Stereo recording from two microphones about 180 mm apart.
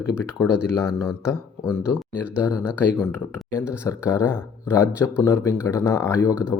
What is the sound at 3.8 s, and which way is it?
Speech, 15° left (ahead or behind).